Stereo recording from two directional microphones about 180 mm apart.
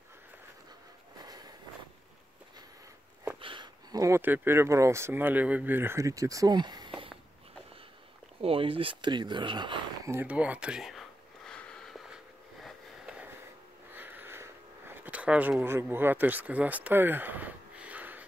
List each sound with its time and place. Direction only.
1.2 s vehicle: 20° right (ahead or behind)
3.3 s speech: 30° right (ahead or behind)
8.4 s speech: 30° right (ahead or behind)
10.1 s a sound: 5° right (ahead or behind)
12.6 s sniff: 5° right (ahead or behind)
13.9 s a sound: 10° right (ahead or behind)